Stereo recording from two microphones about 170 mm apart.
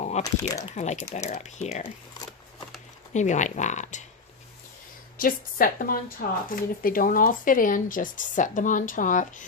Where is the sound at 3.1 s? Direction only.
45° left (ahead or behind).